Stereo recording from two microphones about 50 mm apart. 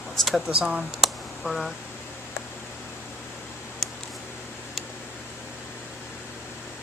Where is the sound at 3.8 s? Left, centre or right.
Centre.